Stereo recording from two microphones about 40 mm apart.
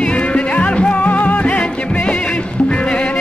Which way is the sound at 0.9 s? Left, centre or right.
Left.